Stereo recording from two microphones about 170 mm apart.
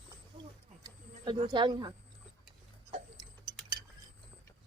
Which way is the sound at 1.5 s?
25° right (ahead or behind).